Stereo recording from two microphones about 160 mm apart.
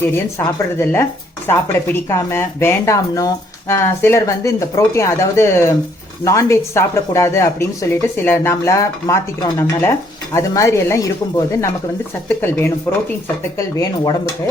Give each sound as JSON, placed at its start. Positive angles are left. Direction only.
{"t": 0.0, "sound": "speech", "side_deg": 15}